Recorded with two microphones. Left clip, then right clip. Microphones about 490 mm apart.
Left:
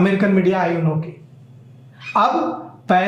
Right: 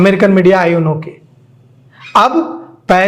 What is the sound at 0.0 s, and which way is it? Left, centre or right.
A man's voice, right.